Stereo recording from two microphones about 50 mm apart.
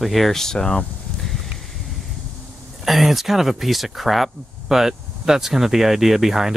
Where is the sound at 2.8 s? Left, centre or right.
Centre.